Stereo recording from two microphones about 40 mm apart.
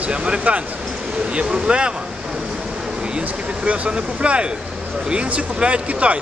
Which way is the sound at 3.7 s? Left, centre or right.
Right.